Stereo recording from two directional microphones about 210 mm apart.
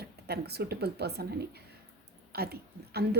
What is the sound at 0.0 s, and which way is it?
A woman's voice, 50° right (ahead or behind).